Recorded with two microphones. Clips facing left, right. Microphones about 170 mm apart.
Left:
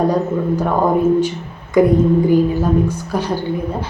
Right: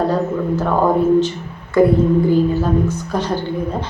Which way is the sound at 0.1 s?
15° left (ahead or behind).